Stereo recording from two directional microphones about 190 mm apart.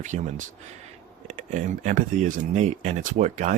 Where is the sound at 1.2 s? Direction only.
40° right (ahead or behind).